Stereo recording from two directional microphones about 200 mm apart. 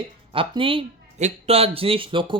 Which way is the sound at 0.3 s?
25° right (ahead or behind).